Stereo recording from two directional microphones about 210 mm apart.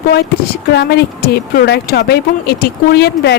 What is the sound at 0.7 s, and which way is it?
Speech, 50° left (ahead or behind).